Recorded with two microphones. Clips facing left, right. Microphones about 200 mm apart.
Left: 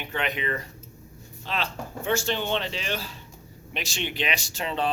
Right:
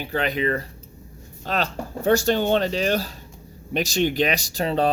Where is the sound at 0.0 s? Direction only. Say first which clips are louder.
Right 6 dB; 35° right (ahead or behind).